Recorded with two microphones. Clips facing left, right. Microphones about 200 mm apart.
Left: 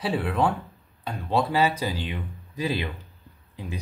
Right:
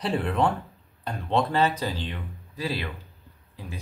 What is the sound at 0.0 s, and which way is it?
Speech, centre (ahead or behind).